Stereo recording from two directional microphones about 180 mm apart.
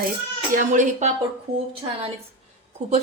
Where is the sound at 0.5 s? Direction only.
45° right (ahead or behind).